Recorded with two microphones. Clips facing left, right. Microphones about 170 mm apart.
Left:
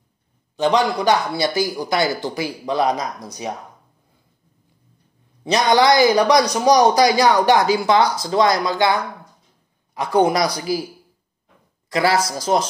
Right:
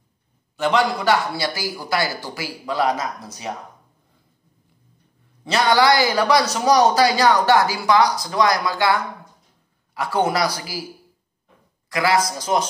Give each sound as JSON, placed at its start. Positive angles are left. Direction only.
{"t": 0.6, "sound": "a man's voice", "side_deg": 15}
{"t": 5.4, "sound": "a man's voice", "side_deg": 20}
{"t": 11.9, "sound": "a man's voice", "side_deg": 30}